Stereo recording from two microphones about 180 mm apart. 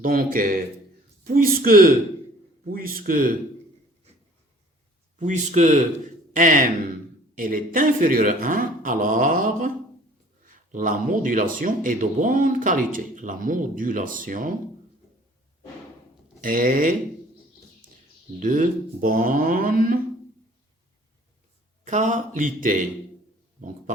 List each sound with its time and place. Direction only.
0.0 s speech: 50° right (ahead or behind)
5.2 s speech: 40° right (ahead or behind)
16.4 s speech: 50° right (ahead or behind)
18.3 s speech: 45° right (ahead or behind)
21.8 s speech: 40° right (ahead or behind)
23.6 s a sound: 45° right (ahead or behind)